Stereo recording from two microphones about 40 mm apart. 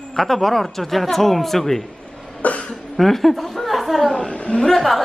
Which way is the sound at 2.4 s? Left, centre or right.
Left.